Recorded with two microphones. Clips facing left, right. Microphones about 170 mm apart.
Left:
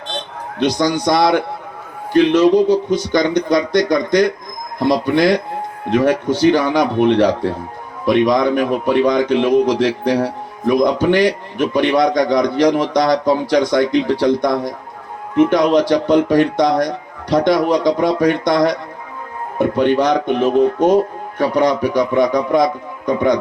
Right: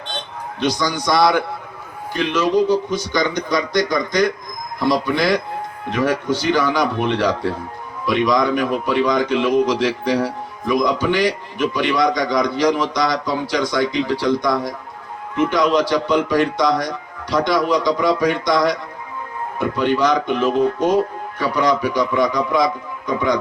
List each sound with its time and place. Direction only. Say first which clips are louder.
0.6 s a man's voice: left 5 dB; 60° left (ahead or behind)